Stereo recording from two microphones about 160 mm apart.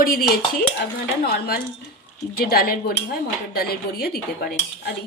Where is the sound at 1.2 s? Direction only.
75° left (ahead or behind).